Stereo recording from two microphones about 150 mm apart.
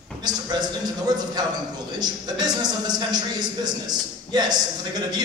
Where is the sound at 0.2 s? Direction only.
25° right (ahead or behind).